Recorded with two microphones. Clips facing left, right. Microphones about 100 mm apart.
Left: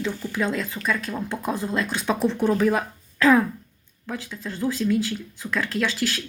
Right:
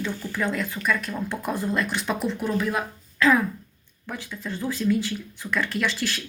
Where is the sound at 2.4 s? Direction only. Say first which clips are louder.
Left 5 dB; 35° left (ahead or behind).